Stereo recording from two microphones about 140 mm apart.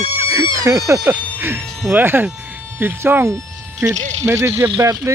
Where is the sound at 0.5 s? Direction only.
20° right (ahead or behind).